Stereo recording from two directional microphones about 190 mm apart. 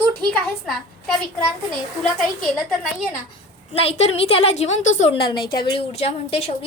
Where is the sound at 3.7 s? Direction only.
30° left (ahead or behind).